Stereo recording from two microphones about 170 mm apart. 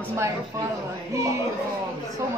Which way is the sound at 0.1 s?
15° right (ahead or behind).